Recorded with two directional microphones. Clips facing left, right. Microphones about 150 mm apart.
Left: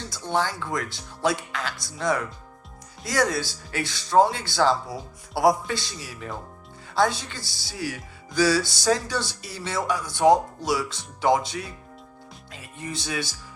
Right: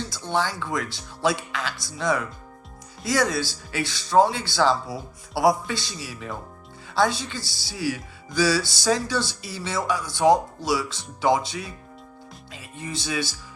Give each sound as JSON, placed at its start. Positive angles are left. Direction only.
{"t": 0.3, "sound": "music", "side_deg": 45}
{"t": 12.5, "sound": "speech", "side_deg": 45}